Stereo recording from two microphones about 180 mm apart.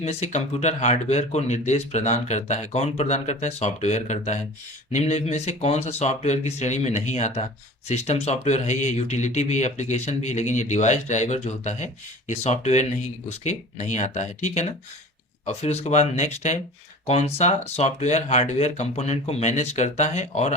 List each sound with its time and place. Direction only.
0.0 s speech: 35° left (ahead or behind)